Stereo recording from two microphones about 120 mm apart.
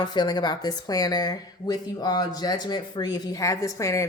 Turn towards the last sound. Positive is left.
turn(degrees=25)  # may be behind; listen again after turning